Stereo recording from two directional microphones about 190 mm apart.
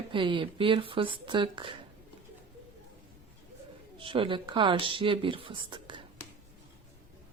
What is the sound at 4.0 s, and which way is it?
Speech, 30° right (ahead or behind).